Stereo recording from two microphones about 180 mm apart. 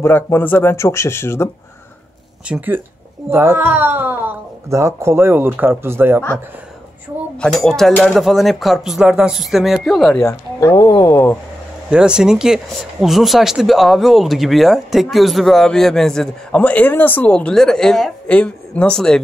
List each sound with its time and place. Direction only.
0.0 s speech: 10° left (ahead or behind)
2.4 s speech: 10° right (ahead or behind)
7.3 s speech: 5° left (ahead or behind)
10.2 s speech: 15° left (ahead or behind)
11.9 s speech: 5° right (ahead or behind)